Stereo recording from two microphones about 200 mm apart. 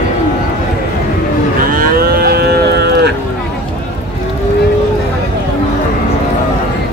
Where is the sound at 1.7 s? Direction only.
45° right (ahead or behind).